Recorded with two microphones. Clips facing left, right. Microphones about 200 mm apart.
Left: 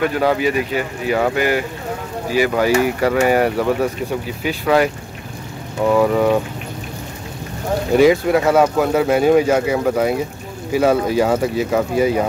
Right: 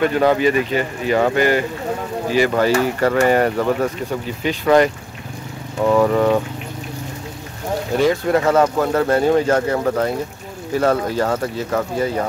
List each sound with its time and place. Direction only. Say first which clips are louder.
0.0 s speech: right 2 dB; 5° left (ahead or behind)
7.9 s speech: left 4 dB; 10° left (ahead or behind)